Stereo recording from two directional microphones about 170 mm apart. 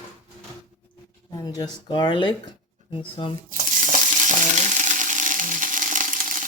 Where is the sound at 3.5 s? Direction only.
50° right (ahead or behind).